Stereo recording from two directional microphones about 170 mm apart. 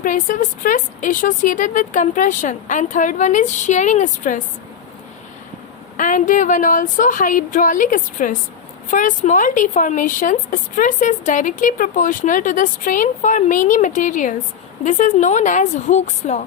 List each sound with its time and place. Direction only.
0.0 s speech: 50° left (ahead or behind)
6.0 s speech: 50° left (ahead or behind)